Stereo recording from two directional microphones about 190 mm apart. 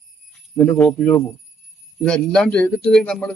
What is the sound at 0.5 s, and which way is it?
A man's voice, 10° left (ahead or behind).